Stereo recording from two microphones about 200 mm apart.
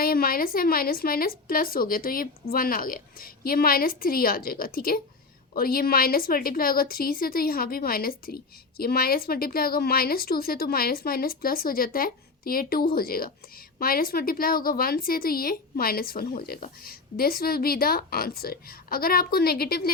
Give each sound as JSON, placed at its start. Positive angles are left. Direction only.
{"t": 0.0, "sound": "a woman's voice", "side_deg": 50}